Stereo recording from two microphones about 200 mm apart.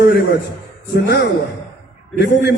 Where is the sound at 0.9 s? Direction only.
55° left (ahead or behind).